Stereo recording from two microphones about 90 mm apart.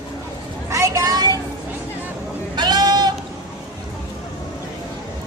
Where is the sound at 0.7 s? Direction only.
35° right (ahead or behind).